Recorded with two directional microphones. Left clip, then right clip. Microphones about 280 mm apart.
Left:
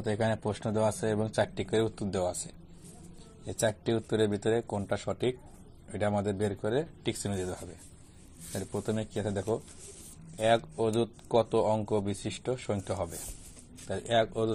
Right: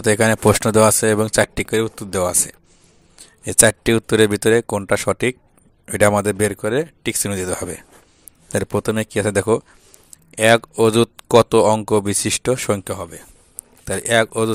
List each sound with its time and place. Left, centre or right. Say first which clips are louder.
0.0 s speech: right 16 dB; right
3.4 s speech: right 15 dB; right